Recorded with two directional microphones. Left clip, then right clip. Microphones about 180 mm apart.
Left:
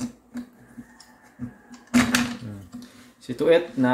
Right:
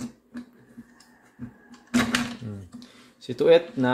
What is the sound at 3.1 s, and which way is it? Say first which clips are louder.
Speech: right 1 dB; 65° right (ahead or behind).